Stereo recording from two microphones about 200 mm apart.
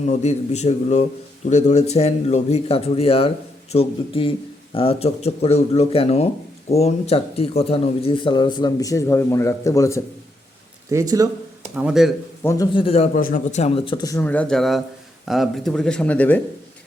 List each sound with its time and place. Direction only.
0.0 s a man's voice: 35° left (ahead or behind); by 10.0 s 15° left (ahead or behind)
10.9 s speech: 15° right (ahead or behind)
11.8 s speech: 5° right (ahead or behind)
12.4 s a man's voice: 15° left (ahead or behind)
12.7 s speech: 30° left (ahead or behind)
13.1 s speech: 40° left (ahead or behind); by 16.4 s 5° left (ahead or behind)